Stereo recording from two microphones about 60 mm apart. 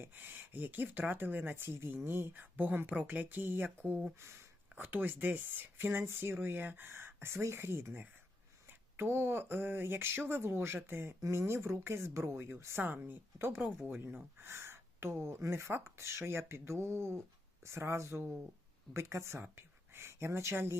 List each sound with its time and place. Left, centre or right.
0.0 s speech: right
4.2 s speech: right
4.7 s speech: right
12.8 s speech: right